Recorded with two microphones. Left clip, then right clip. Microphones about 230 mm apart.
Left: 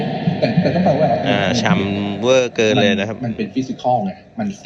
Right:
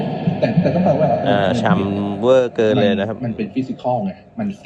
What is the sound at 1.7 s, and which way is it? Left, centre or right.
A man's voice, left.